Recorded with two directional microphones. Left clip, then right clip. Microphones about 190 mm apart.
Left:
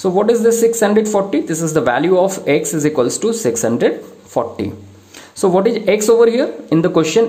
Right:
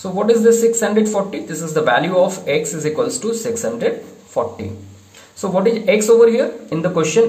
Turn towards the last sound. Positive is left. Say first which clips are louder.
# left 2 dB
turn(degrees=40)  # may be behind; listen again after turning